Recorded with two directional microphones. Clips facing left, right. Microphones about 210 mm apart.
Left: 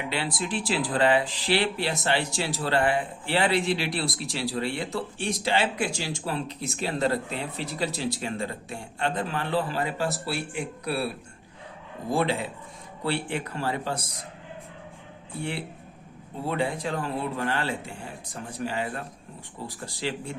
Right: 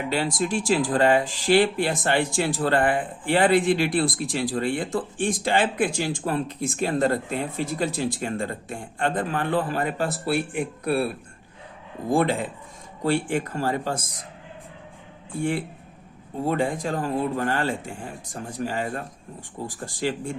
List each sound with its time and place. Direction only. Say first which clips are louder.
0.1 s speech: right 6 dB; 45° right (ahead or behind)
12.1 s speech: right 4 dB; 50° right (ahead or behind)
15.4 s speech: right 7 dB; 45° right (ahead or behind)